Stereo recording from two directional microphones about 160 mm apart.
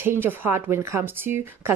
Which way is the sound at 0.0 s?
15° right (ahead or behind).